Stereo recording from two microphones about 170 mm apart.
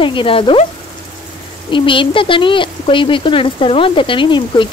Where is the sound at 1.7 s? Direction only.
30° left (ahead or behind).